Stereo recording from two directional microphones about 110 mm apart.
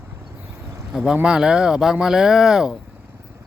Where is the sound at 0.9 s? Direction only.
5° right (ahead or behind).